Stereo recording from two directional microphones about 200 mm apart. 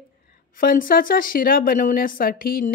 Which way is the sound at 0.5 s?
45° left (ahead or behind).